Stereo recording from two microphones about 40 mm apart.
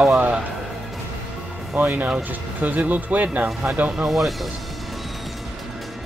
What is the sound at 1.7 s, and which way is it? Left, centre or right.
Speech, right.